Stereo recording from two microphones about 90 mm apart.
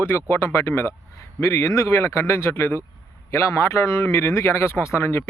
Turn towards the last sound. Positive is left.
turn(degrees=30)  # may be behind; listen again after turning